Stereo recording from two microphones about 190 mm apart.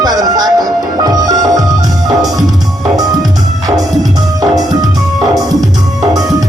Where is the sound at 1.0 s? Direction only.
20° right (ahead or behind).